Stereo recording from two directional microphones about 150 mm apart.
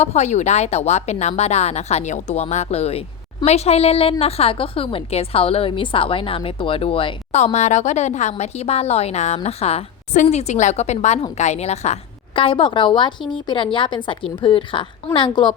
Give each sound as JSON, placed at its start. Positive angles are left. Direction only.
{"t": 0.0, "sound": "a woman's voice", "side_deg": 50}
{"t": 12.4, "sound": "a woman's voice", "side_deg": 35}